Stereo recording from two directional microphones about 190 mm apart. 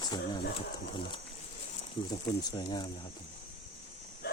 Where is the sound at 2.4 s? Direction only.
20° left (ahead or behind).